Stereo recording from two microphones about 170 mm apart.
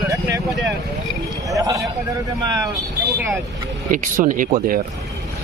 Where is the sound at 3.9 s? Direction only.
50° right (ahead or behind).